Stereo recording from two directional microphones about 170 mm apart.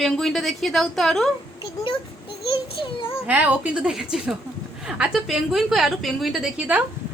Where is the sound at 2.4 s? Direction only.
30° left (ahead or behind).